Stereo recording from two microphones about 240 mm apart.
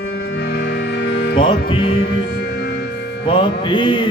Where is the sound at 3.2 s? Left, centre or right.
Centre.